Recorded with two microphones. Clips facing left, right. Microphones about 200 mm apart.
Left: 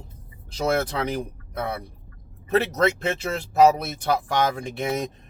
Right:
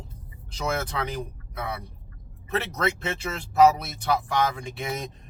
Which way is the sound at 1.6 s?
50° left (ahead or behind).